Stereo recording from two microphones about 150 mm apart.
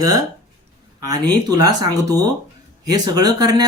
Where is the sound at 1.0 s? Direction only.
25° right (ahead or behind).